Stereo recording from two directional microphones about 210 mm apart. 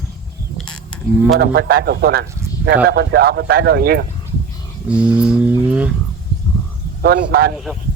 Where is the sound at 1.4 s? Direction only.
45° right (ahead or behind).